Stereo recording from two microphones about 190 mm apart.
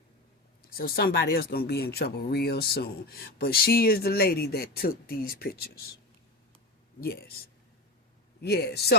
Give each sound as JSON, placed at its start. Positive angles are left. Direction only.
{"t": 0.7, "sound": "speech", "side_deg": 55}
{"t": 7.0, "sound": "a man's voice", "side_deg": 55}
{"t": 8.4, "sound": "a man's voice", "side_deg": 60}